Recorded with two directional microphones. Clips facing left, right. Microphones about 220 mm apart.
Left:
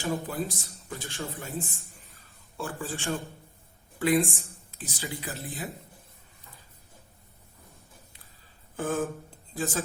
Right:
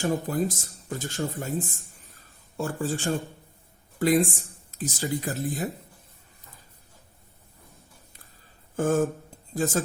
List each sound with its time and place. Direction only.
0.0 s speech: 45° right (ahead or behind)
3.9 s speech: 40° right (ahead or behind)
8.7 s a sound: 45° right (ahead or behind)
9.6 s speech: 45° right (ahead or behind)